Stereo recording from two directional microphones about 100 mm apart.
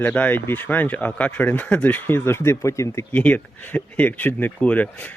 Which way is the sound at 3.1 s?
15° left (ahead or behind).